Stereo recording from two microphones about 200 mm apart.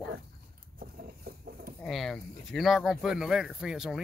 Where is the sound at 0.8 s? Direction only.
50° right (ahead or behind).